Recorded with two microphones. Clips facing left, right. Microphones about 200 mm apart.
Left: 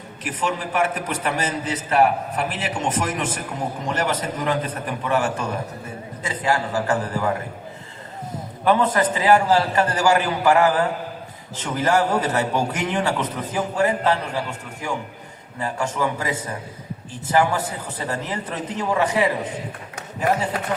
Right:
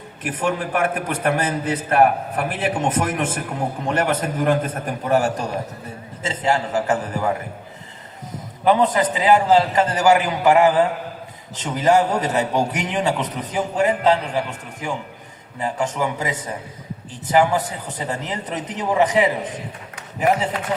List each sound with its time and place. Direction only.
0.2 s a man's voice: 55° right (ahead or behind)
6.2 s a man's voice: 25° right (ahead or behind)
8.6 s a man's voice: 15° right (ahead or behind)